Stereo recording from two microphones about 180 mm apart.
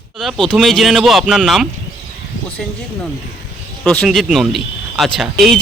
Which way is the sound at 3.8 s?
Centre (ahead or behind).